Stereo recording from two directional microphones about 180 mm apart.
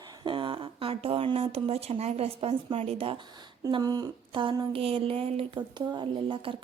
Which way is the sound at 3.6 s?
20° right (ahead or behind).